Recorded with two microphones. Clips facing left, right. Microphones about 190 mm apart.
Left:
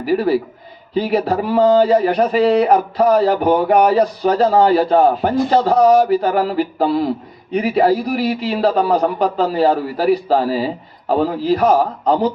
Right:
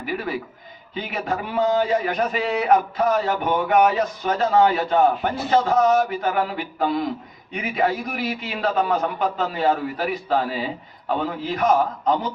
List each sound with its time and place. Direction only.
0.0 s a man's voice: 35° left (ahead or behind)